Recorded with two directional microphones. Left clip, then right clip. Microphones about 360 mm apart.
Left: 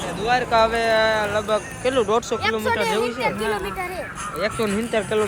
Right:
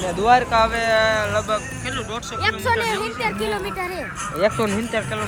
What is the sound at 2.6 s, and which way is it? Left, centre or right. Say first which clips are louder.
Speech: even; right.